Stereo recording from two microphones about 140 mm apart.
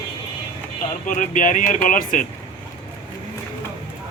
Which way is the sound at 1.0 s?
65° left (ahead or behind).